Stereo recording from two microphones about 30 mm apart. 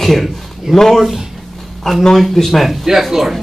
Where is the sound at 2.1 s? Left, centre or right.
Centre.